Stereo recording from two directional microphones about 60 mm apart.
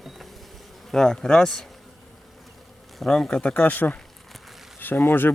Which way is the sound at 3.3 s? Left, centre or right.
Left.